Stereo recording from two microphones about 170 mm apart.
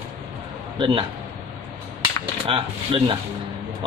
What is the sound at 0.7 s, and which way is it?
Speech, 30° right (ahead or behind).